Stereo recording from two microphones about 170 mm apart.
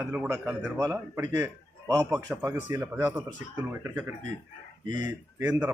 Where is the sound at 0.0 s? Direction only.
10° right (ahead or behind).